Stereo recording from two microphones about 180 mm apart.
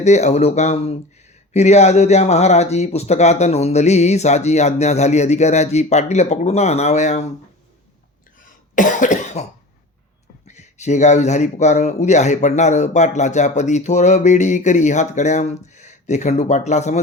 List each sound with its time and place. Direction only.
0.0 s speech: 40° left (ahead or behind)
8.7 s cough: 45° left (ahead or behind)
10.4 s speech: 40° left (ahead or behind)